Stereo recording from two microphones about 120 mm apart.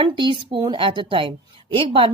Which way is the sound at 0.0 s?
45° right (ahead or behind).